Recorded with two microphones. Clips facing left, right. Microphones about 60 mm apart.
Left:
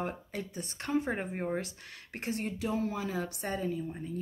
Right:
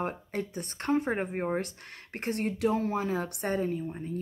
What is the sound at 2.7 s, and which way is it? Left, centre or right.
Speech, right.